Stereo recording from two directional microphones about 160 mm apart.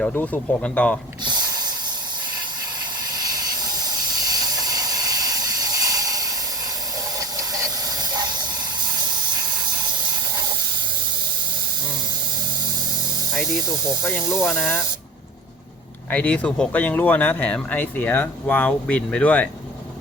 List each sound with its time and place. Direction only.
0.0 s speech: 10° left (ahead or behind)
1.2 s a sound: 25° right (ahead or behind)
3.1 s hiss: 25° right (ahead or behind)
7.2 s steam: 20° right (ahead or behind)
14.0 s speech: 15° left (ahead or behind)
16.0 s speech: 10° left (ahead or behind)